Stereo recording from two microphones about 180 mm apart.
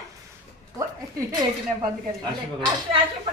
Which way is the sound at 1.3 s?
25° right (ahead or behind).